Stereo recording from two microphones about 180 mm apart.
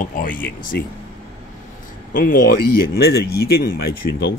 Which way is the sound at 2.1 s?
50° left (ahead or behind).